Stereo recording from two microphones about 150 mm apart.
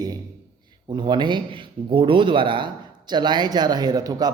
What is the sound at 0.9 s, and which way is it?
A man's voice, 30° right (ahead or behind).